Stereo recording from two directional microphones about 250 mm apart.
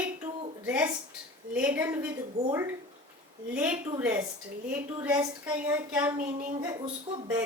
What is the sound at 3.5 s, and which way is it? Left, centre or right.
Speech, centre.